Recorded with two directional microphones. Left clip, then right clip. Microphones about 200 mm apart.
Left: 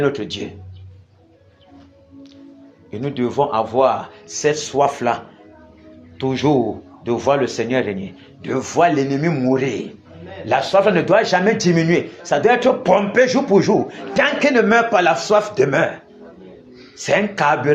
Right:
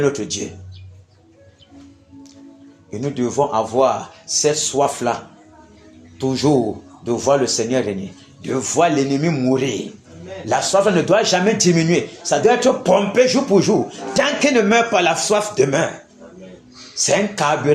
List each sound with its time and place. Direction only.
0.0 s speech: 5° right (ahead or behind)
2.9 s speech: 5° right (ahead or behind)
17.1 s speech: 5° right (ahead or behind)